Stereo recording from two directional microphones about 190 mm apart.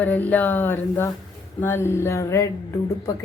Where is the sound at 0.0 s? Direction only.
10° left (ahead or behind).